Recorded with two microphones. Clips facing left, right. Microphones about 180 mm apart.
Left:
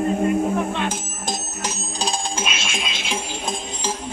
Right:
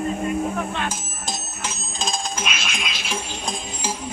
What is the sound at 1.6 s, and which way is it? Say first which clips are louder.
Music: left 1 dB; 35° left (ahead or behind).